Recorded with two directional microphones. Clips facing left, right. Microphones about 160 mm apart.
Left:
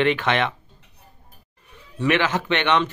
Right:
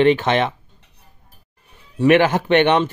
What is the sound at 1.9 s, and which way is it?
Speech, 45° right (ahead or behind).